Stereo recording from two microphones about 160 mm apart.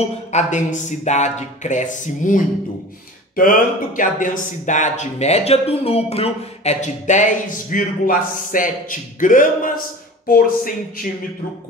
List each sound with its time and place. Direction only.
0.3 s speech: 45° left (ahead or behind); by 11.1 s 60° left (ahead or behind)